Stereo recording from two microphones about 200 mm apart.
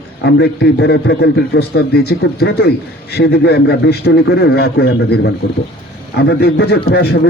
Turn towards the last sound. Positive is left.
turn(degrees=55)  # may be behind; listen again after turning